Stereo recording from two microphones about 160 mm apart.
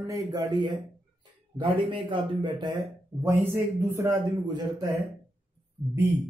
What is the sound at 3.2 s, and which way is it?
Speech, 15° right (ahead or behind).